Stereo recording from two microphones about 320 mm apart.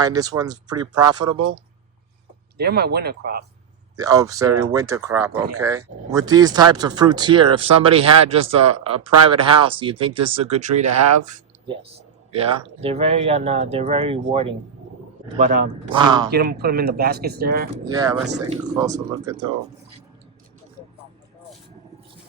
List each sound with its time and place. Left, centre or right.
0.0 s speech: centre
2.6 s speech: right
3.9 s speech: centre
10.8 s speech: right
11.3 s speech: centre
16.3 s speech: right
17.8 s speech: centre